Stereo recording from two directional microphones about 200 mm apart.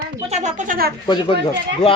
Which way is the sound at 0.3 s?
35° right (ahead or behind).